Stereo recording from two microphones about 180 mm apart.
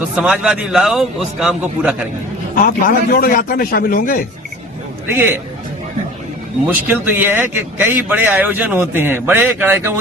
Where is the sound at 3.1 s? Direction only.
55° left (ahead or behind).